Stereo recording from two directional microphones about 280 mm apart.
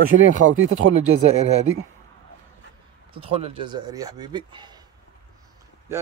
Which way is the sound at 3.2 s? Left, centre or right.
Centre.